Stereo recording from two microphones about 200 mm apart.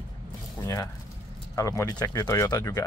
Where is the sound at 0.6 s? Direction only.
15° left (ahead or behind).